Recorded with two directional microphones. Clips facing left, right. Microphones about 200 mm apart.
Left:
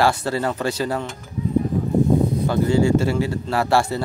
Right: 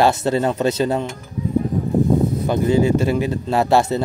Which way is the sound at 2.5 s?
20° right (ahead or behind).